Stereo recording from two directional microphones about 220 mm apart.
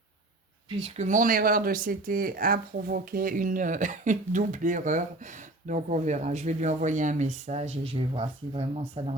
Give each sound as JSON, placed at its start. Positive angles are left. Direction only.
{"t": 0.8, "sound": "speech", "side_deg": -30}